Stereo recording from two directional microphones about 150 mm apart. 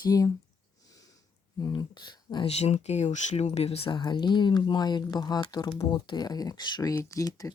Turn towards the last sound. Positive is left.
turn(degrees=25)  # may be behind; listen again after turning